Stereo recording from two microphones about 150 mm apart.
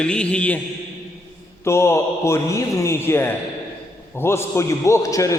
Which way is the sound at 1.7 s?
20° left (ahead or behind).